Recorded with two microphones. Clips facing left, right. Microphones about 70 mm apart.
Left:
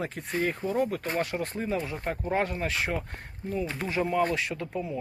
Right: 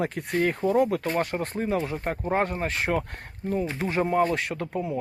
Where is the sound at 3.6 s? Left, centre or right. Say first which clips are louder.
Right 3 dB; centre.